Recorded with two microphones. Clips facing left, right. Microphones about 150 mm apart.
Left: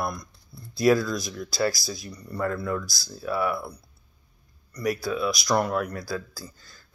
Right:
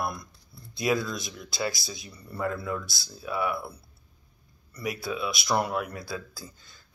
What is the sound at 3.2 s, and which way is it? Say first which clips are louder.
Speech: left 3 dB; 15° right (ahead or behind).